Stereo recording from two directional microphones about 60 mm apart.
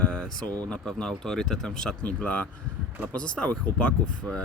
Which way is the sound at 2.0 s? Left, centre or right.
Left.